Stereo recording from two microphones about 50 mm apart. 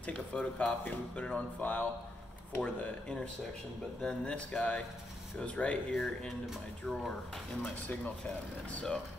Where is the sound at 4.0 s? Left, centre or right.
Centre.